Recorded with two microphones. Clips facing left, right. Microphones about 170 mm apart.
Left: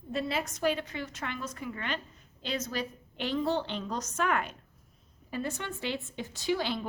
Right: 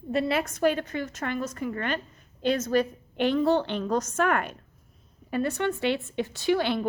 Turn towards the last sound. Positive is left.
turn(degrees=-60)  # may be behind; listen again after turning